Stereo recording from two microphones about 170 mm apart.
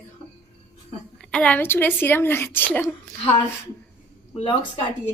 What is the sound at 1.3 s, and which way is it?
Speech, 5° left (ahead or behind).